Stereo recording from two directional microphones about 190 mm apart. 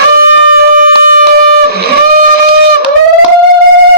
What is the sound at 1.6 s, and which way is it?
Guitar, 55° right (ahead or behind).